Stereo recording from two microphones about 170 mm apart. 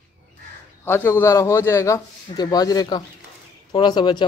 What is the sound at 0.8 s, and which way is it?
A man's voice, 15° left (ahead or behind).